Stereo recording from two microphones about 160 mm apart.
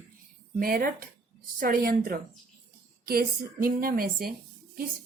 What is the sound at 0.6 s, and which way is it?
Speech, 65° right (ahead or behind).